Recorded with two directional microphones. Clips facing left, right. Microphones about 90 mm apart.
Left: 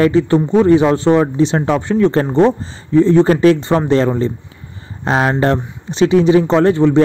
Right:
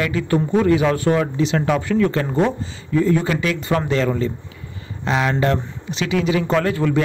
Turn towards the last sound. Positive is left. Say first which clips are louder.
# left 7 dB
turn(degrees=25)  # may be behind; listen again after turning